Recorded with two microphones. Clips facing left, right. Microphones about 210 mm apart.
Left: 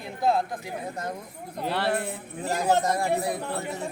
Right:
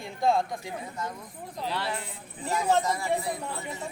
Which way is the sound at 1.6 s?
60° left (ahead or behind).